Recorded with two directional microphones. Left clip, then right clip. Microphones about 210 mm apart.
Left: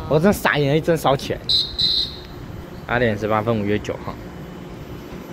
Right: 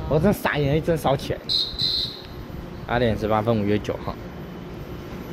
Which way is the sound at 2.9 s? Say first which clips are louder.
Left 2 dB; 5° right (ahead or behind).